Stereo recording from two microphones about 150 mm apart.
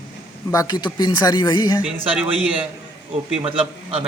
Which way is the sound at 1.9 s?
40° right (ahead or behind).